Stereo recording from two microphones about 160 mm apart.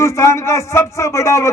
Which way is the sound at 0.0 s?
20° left (ahead or behind).